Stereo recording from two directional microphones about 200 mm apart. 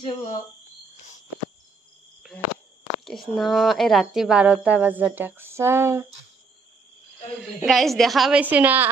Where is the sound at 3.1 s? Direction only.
Centre (ahead or behind).